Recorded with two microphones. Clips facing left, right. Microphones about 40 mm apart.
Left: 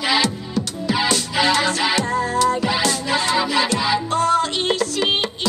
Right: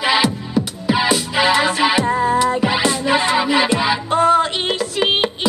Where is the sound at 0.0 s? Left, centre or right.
Centre.